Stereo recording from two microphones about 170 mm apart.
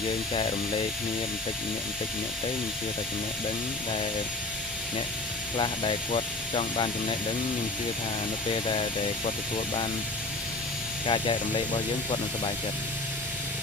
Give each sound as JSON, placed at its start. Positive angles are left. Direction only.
{"t": 5.6, "sound": "speech", "side_deg": 30}
{"t": 8.6, "sound": "speech", "side_deg": 30}
{"t": 11.1, "sound": "speech", "side_deg": 30}